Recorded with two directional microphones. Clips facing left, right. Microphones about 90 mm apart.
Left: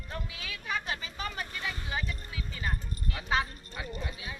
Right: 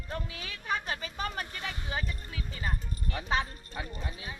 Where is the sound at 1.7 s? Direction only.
25° right (ahead or behind).